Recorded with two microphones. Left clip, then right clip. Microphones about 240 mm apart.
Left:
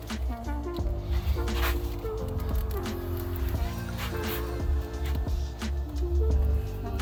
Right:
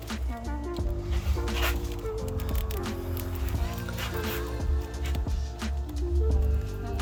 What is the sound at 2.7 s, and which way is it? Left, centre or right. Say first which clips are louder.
Music: even; centre.